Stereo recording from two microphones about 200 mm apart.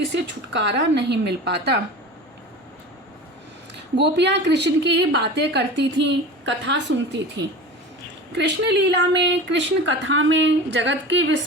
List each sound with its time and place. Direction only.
0.1 s a woman's voice: 60° right (ahead or behind)
3.9 s a woman's voice: 60° right (ahead or behind)